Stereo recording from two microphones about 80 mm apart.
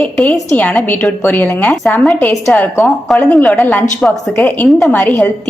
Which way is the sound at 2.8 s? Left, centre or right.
Centre.